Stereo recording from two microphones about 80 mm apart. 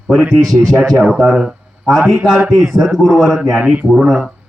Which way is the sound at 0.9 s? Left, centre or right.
Centre.